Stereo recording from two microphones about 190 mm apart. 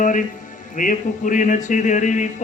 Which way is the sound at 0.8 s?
45° left (ahead or behind).